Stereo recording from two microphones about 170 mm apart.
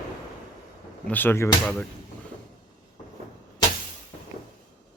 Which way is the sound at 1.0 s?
10° left (ahead or behind).